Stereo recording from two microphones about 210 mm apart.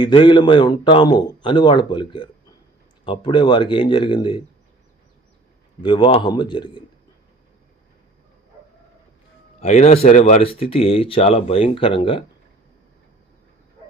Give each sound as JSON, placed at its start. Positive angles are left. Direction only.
{"t": 0.0, "sound": "speech", "side_deg": 25}
{"t": 5.8, "sound": "speech", "side_deg": 25}
{"t": 9.6, "sound": "speech", "side_deg": 30}